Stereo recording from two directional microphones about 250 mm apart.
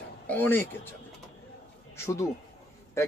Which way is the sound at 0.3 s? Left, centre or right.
Centre.